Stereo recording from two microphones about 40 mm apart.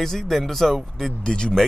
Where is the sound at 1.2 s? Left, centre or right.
Left.